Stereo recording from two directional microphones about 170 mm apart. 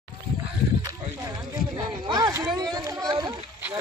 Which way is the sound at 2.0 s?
25° right (ahead or behind).